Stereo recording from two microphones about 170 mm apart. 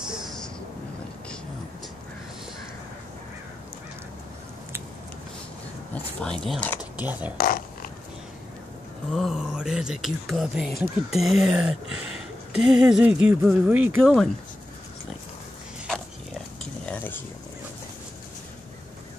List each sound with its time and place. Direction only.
0.1 s vehicle: centre (ahead or behind)
6.2 s speech: 5° left (ahead or behind)
6.8 s speech: 10° right (ahead or behind)
7.3 s zipper: 60° left (ahead or behind)
9.1 s speech: centre (ahead or behind)
16.8 s cutlery: 10° left (ahead or behind)